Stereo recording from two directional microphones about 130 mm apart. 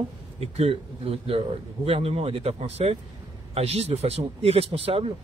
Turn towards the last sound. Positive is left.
turn(degrees=-50)  # may be behind; listen again after turning